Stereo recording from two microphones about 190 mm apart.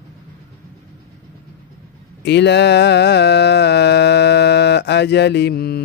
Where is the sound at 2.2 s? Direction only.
65° left (ahead or behind).